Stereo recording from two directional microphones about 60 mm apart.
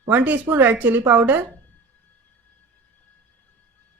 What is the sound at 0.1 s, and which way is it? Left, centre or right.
A woman's voice, right.